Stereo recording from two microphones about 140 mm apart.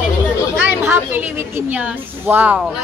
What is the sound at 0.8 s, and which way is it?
A woman's voice, 15° right (ahead or behind).